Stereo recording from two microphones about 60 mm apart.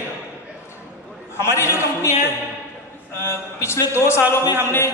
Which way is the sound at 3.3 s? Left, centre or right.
Left.